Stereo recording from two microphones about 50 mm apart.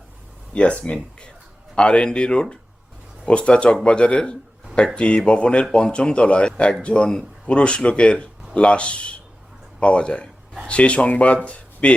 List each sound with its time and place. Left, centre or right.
0.5 s speech: left